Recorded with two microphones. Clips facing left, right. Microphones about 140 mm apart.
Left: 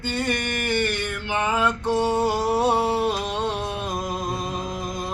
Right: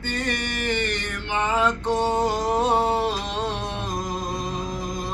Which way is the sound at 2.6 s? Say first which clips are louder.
Right 1 dB; 10° left (ahead or behind).